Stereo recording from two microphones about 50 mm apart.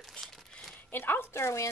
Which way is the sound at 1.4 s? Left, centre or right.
Left.